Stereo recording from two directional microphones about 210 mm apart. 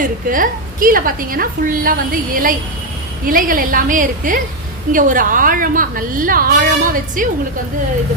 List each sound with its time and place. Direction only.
0.0 s a woman's voice: 40° right (ahead or behind)